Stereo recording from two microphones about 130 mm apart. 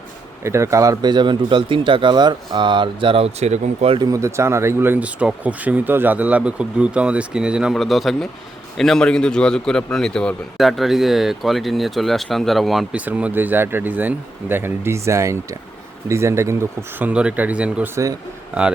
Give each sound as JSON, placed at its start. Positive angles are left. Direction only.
{"t": 0.4, "sound": "speech", "side_deg": -20}
{"t": 3.9, "sound": "a man's voice", "side_deg": -30}
{"t": 13.1, "sound": "speech", "side_deg": -10}
{"t": 17.1, "sound": "speech", "side_deg": -10}
{"t": 17.9, "sound": "speech", "side_deg": -25}